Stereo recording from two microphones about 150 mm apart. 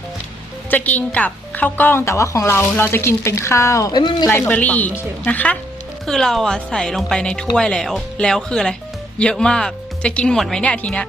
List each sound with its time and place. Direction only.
0.7 s a woman's voice: 10° left (ahead or behind); by 4.3 s 30° left (ahead or behind)
4.3 s a woman's voice: 15° left (ahead or behind)